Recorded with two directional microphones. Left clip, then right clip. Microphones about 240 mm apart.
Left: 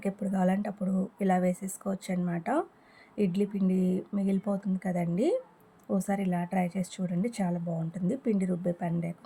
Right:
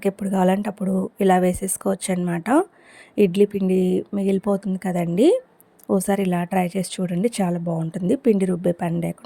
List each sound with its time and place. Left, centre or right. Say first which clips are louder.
0.0 s speech: right 10 dB; right